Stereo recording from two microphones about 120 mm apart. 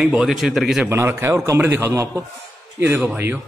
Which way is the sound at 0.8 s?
20° right (ahead or behind).